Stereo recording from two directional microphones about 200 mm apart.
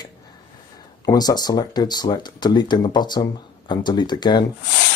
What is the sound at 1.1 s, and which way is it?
Speech, 20° left (ahead or behind).